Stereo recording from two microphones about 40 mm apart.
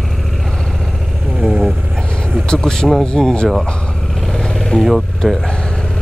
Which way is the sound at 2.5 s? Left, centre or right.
Centre.